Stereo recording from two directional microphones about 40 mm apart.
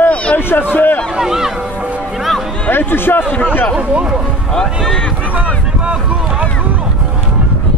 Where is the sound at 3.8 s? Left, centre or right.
Right.